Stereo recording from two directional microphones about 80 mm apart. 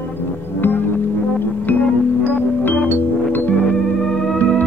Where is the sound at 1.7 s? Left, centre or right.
Left.